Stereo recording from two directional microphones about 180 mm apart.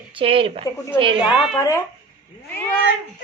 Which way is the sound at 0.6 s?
15° left (ahead or behind).